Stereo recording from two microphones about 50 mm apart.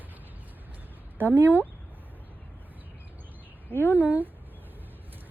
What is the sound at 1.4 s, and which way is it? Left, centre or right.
Speech, right.